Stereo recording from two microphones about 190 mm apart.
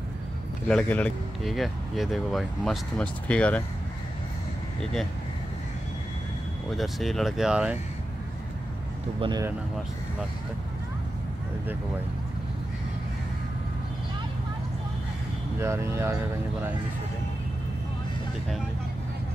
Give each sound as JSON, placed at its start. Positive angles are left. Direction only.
{"t": 0.7, "sound": "speech", "side_deg": 5}
{"t": 6.7, "sound": "speech", "side_deg": 0}
{"t": 9.2, "sound": "speech", "side_deg": -20}
{"t": 15.6, "sound": "speech", "side_deg": -15}